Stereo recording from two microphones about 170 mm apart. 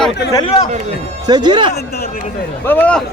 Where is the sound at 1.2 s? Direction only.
25° right (ahead or behind).